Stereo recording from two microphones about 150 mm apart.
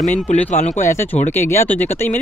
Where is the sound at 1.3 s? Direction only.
15° left (ahead or behind).